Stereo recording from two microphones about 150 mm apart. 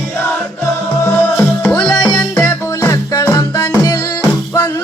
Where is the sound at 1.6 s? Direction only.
15° left (ahead or behind).